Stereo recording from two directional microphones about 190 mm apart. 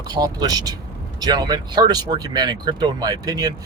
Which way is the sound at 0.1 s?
20° right (ahead or behind).